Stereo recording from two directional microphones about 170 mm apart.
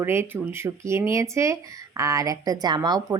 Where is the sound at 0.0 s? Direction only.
15° right (ahead or behind).